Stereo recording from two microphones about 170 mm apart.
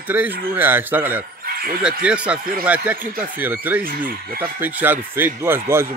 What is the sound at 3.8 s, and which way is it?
Speech, 55° right (ahead or behind).